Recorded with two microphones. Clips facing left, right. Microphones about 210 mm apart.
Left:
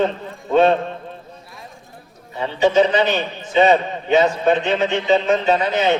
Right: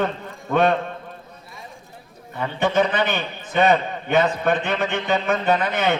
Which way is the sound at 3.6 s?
60° right (ahead or behind).